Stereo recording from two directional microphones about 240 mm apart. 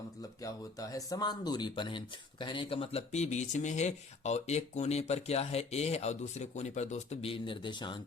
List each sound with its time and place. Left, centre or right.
0.2 s speech: centre